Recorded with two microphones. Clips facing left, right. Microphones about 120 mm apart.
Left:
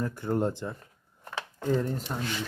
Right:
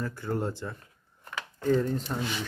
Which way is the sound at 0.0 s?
20° left (ahead or behind).